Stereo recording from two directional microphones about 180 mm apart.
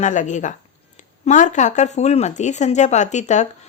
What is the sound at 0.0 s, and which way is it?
A woman's voice, 45° left (ahead or behind).